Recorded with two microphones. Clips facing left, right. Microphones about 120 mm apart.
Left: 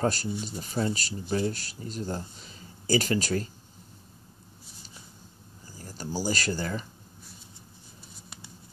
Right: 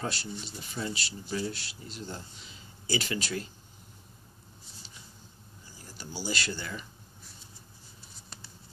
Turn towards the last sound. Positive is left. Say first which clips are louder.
# left 5 dB
turn(degrees=40)  # may be behind; listen again after turning